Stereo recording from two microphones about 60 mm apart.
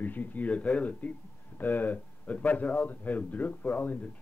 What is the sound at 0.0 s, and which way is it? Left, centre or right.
A man's voice, left.